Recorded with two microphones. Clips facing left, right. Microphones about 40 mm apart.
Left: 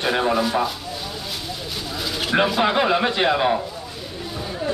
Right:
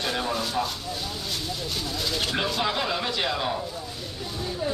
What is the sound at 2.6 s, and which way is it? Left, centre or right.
Speech, left.